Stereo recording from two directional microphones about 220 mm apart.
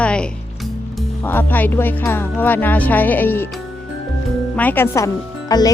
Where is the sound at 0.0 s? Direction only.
5° left (ahead or behind).